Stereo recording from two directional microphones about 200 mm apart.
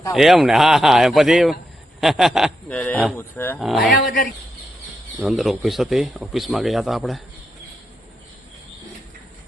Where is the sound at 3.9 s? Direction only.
45° left (ahead or behind).